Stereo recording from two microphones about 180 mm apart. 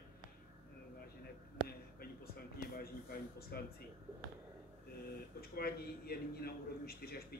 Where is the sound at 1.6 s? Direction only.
55° left (ahead or behind).